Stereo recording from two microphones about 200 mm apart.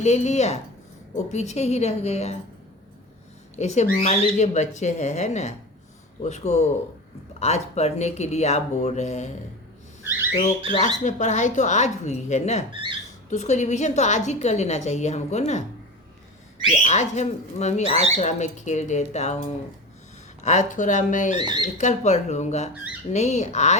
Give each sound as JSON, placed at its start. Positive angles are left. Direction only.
{"t": 0.0, "sound": "a woman's voice", "side_deg": 35}
{"t": 3.5, "sound": "a woman's voice", "side_deg": 35}
{"t": 10.0, "sound": "a sound", "side_deg": -10}
{"t": 10.8, "sound": "a woman's voice", "side_deg": 35}
{"t": 12.7, "sound": "speech", "side_deg": -25}
{"t": 13.3, "sound": "a woman's voice", "side_deg": 35}
{"t": 16.8, "sound": "a woman's voice", "side_deg": 35}
{"t": 21.4, "sound": "speech", "side_deg": -20}
{"t": 21.8, "sound": "a woman's voice", "side_deg": 35}